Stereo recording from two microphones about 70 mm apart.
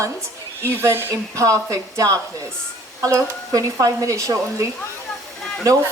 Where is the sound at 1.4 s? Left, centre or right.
Right.